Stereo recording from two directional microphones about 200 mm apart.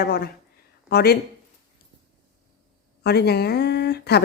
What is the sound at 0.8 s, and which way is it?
Speech, 50° left (ahead or behind).